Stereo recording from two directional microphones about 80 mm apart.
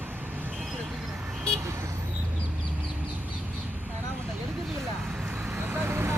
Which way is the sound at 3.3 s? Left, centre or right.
Right.